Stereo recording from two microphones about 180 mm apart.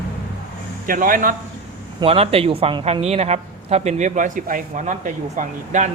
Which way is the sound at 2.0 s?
30° right (ahead or behind).